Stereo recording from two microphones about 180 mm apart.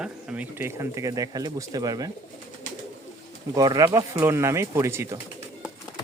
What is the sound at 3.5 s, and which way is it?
Speech, 20° right (ahead or behind).